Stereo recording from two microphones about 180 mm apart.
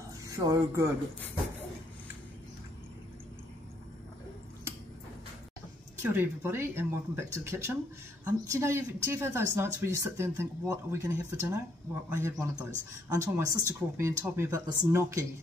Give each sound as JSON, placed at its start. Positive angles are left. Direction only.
{"t": 0.3, "sound": "speech", "side_deg": -15}
{"t": 6.1, "sound": "speech", "side_deg": -15}